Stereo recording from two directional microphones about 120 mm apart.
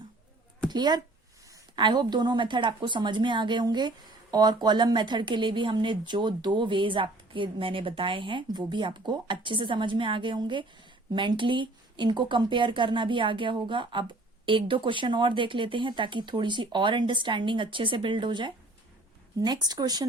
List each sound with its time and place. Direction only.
0.7 s speech: 35° right (ahead or behind)